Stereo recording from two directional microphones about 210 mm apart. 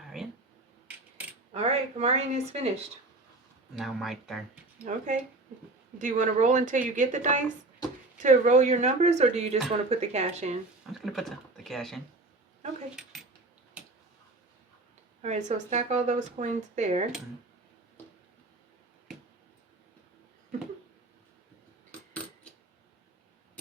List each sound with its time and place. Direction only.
0.1 s a sound: centre (ahead or behind)
1.5 s speech: 30° right (ahead or behind)
3.8 s speech: centre (ahead or behind)
4.9 s speech: 35° right (ahead or behind)
11.0 s speech: centre (ahead or behind)
13.8 s a sound: 5° right (ahead or behind)
15.2 s speech: 35° right (ahead or behind)
22.1 s coin: 5° left (ahead or behind)